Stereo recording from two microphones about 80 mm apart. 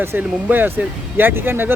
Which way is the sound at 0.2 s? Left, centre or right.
Right.